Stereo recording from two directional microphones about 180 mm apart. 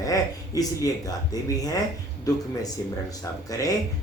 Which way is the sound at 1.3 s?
20° left (ahead or behind).